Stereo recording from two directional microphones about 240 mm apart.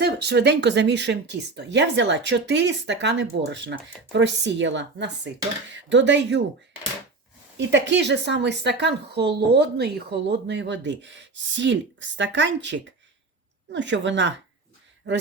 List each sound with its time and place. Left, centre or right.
0.0 s speech: right
7.7 s speech: right